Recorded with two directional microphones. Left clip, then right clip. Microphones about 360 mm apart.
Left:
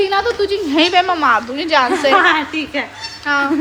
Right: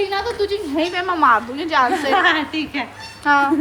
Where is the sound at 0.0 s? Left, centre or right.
Centre.